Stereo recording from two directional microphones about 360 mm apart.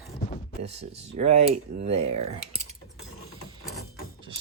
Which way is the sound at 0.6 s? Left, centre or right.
Centre.